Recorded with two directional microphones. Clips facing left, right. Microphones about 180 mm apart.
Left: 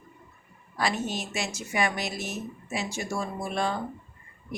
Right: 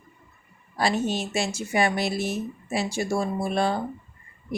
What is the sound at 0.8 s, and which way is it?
Speech, 30° right (ahead or behind).